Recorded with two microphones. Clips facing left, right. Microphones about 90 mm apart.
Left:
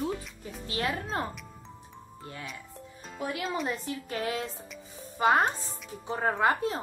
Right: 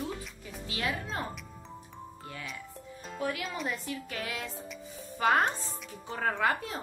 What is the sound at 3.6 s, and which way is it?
Speech, 35° left (ahead or behind).